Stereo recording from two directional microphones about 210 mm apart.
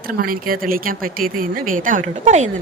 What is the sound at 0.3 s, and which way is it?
Speech, 40° right (ahead or behind).